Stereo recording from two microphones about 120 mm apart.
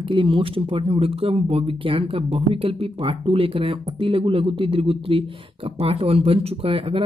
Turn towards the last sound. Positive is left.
turn(degrees=-50)  # may be behind; listen again after turning